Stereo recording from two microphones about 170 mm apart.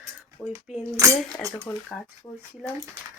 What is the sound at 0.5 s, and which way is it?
Cutlery, 15° right (ahead or behind).